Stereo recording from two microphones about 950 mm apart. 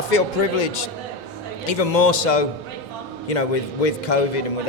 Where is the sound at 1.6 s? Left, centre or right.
Left.